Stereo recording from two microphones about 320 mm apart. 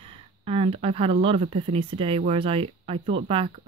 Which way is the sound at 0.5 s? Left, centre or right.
Centre.